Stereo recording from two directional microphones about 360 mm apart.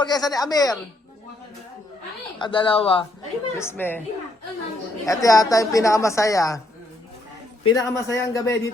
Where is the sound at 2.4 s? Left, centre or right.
Centre.